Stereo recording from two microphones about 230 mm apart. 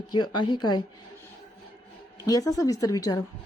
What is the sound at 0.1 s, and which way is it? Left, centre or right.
Speech, centre.